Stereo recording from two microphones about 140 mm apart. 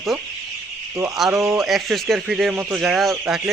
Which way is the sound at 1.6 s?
Centre (ahead or behind).